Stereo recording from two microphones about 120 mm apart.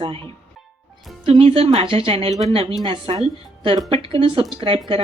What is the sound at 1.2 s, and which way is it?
Speech, 55° right (ahead or behind).